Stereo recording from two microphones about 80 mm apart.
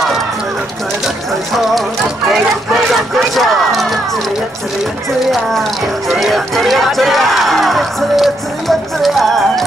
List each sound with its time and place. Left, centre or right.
1.0 s speech: centre
5.3 s speech: centre